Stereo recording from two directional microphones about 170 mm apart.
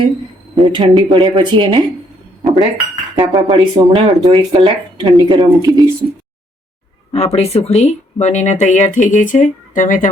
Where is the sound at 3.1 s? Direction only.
25° right (ahead or behind).